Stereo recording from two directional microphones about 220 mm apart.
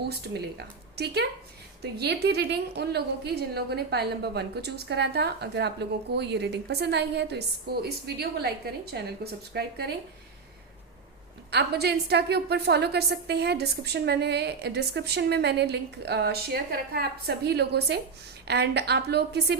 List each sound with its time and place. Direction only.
0.0 s a woman's voice: 45° right (ahead or behind)
11.5 s a woman's voice: 45° right (ahead or behind)